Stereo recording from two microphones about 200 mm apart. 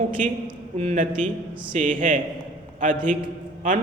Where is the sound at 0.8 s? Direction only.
35° right (ahead or behind).